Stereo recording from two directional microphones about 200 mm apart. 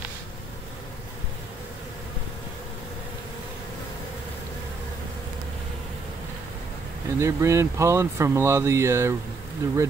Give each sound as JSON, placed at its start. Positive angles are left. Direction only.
{"t": 7.2, "sound": "speech", "side_deg": -15}